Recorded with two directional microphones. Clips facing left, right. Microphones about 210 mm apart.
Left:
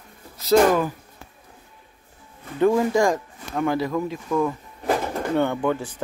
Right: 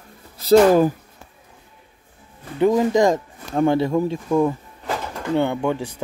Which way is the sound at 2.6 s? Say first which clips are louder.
Right 2 dB; 20° right (ahead or behind).